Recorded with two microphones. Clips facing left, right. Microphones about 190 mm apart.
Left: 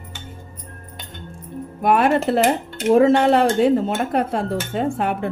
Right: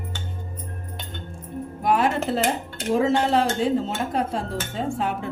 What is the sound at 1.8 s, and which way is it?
Speech, 60° left (ahead or behind).